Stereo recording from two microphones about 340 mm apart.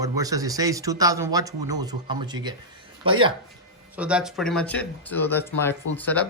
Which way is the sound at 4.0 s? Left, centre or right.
Centre.